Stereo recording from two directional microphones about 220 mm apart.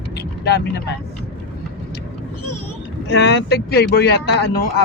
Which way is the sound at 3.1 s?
50° left (ahead or behind).